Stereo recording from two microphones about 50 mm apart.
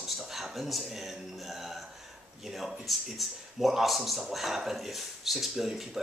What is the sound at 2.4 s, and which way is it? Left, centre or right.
Speech, centre.